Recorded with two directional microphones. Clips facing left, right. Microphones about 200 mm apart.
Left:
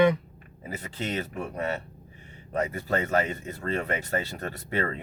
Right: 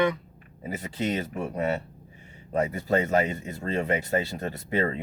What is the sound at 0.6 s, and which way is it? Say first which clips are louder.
Speech: right 4 dB; 15° right (ahead or behind).